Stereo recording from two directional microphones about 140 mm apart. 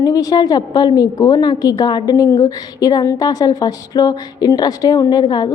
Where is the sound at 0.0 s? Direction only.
25° left (ahead or behind).